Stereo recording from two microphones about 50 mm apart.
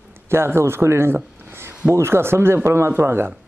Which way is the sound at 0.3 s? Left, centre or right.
Right.